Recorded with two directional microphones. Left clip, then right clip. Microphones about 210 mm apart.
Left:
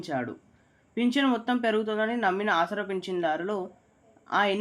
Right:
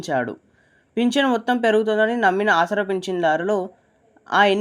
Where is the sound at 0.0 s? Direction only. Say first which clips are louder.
Right 9 dB; 35° right (ahead or behind).